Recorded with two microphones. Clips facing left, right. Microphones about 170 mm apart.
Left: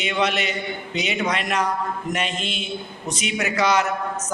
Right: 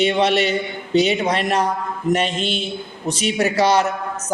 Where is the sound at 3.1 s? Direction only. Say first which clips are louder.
Right 6 dB; 30° right (ahead or behind).